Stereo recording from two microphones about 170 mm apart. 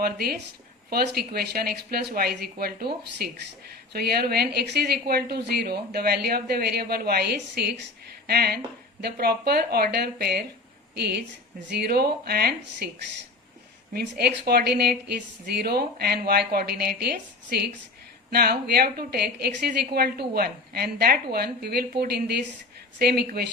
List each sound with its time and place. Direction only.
0.0 s a woman's voice: 65° right (ahead or behind)
13.9 s a woman's voice: 70° right (ahead or behind)